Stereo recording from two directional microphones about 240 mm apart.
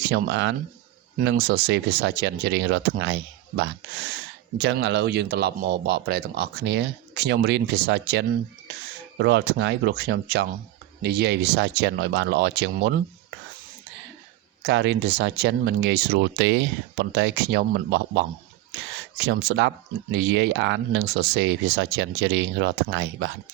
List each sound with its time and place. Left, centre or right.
0.0 s speech: right
4.5 s speech: right
14.6 s speech: right